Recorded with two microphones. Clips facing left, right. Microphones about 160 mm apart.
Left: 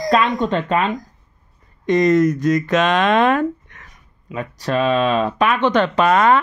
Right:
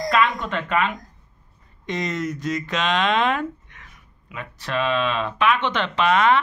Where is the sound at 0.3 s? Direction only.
30° left (ahead or behind).